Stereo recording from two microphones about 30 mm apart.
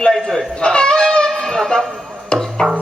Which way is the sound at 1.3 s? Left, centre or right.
Centre.